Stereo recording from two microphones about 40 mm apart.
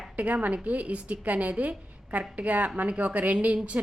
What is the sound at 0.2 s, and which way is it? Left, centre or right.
A woman's voice, right.